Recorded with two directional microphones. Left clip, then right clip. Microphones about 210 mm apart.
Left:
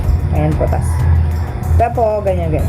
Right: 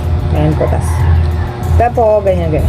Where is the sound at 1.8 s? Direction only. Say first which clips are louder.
Right 4 dB; centre (ahead or behind).